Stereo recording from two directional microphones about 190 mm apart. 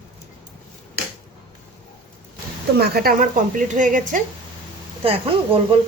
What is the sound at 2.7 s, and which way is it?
A woman's voice, 55° right (ahead or behind).